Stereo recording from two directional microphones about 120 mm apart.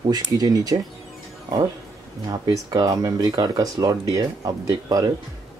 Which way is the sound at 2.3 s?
30° right (ahead or behind).